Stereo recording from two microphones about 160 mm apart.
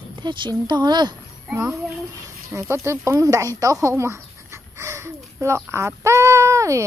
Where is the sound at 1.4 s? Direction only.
15° right (ahead or behind).